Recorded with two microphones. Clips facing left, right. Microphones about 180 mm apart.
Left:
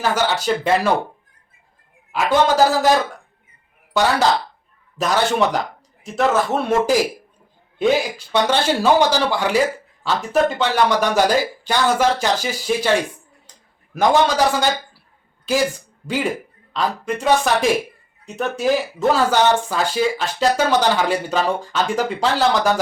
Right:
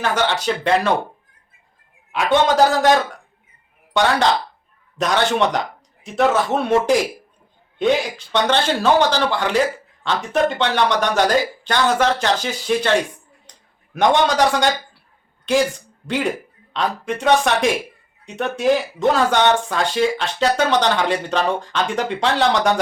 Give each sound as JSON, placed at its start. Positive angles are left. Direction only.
{"t": 0.0, "sound": "speech", "side_deg": 5}
{"t": 2.1, "sound": "a man's voice", "side_deg": 5}